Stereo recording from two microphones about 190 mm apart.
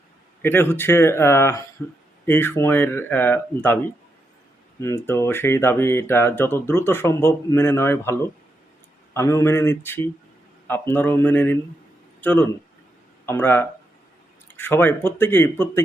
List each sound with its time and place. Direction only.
0.4 s speech: 10° left (ahead or behind)
4.8 s speech: 15° left (ahead or behind)